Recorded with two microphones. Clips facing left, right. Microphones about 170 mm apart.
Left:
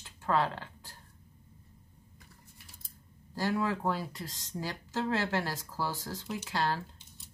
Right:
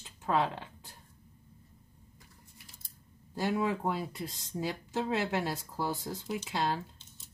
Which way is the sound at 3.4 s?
20° right (ahead or behind).